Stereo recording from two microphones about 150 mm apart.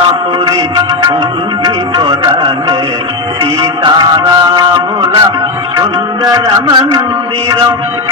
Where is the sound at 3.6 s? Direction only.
30° right (ahead or behind).